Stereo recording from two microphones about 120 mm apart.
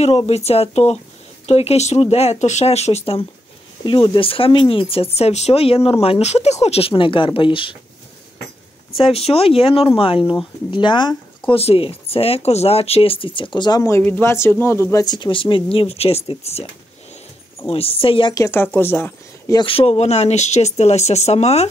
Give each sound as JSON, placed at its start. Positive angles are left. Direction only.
{"t": 0.0, "sound": "speech", "side_deg": 60}
{"t": 3.8, "sound": "speech", "side_deg": 45}
{"t": 8.9, "sound": "speech", "side_deg": 50}
{"t": 13.8, "sound": "speech", "side_deg": 20}
{"t": 17.6, "sound": "speech", "side_deg": 50}
{"t": 18.3, "sound": "speech", "side_deg": 25}
{"t": 19.5, "sound": "speech", "side_deg": 45}